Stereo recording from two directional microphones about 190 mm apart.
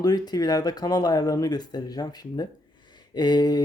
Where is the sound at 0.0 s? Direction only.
20° left (ahead or behind).